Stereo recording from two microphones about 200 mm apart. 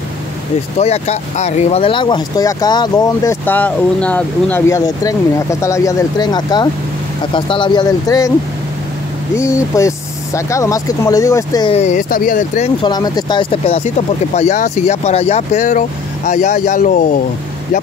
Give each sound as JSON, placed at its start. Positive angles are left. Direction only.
{"t": 0.7, "sound": "speech", "side_deg": 30}
{"t": 9.4, "sound": "speech", "side_deg": 15}
{"t": 11.7, "sound": "speech", "side_deg": 35}
{"t": 12.8, "sound": "speech", "side_deg": 20}